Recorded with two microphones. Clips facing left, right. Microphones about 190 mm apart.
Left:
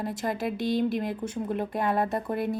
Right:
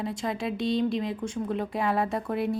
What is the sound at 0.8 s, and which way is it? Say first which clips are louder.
Speech: even; 55° left (ahead or behind).